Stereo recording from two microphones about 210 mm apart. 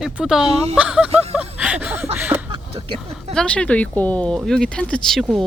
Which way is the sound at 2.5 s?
25° right (ahead or behind).